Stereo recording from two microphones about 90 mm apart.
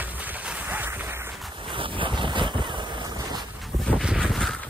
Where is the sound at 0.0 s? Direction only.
20° right (ahead or behind).